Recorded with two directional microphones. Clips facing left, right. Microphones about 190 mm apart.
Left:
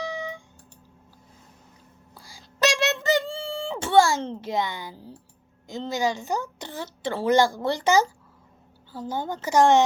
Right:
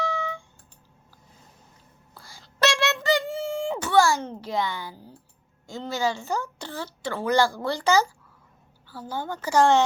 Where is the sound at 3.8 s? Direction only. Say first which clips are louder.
Left 2 dB; 25° left (ahead or behind).